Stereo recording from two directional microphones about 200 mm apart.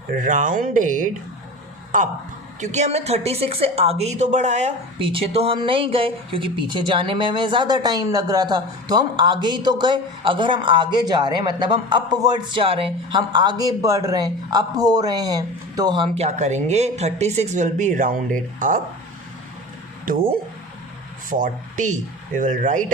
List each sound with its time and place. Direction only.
0.2 s speech: 40° right (ahead or behind)
2.6 s a woman's voice: 35° right (ahead or behind)
16.1 s speech: 35° right (ahead or behind)
21.2 s speech: 40° right (ahead or behind)